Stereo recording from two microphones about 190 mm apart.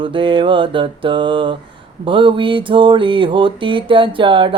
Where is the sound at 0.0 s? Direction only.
25° right (ahead or behind).